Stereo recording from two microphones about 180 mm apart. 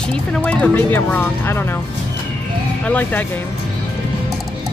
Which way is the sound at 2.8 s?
10° left (ahead or behind).